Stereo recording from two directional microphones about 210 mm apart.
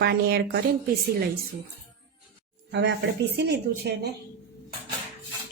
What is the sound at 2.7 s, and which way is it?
Speech, 55° right (ahead or behind).